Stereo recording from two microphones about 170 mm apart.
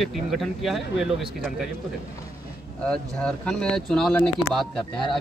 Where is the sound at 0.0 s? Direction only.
Centre (ahead or behind).